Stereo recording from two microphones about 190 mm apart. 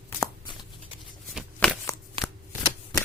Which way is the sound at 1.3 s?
Centre (ahead or behind).